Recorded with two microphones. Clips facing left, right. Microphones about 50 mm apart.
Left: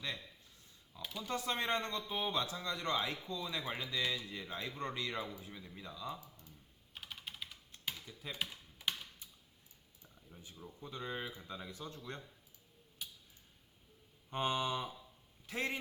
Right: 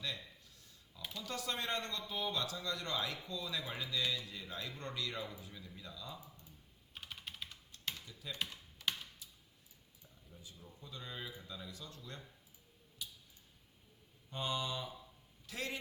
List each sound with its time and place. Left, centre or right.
1.1 s speech: left
6.9 s typing: centre
8.0 s speech: left
8.4 s computer keyboard: centre
10.0 s a sound: left
11.4 s speech: left
14.3 s speech: left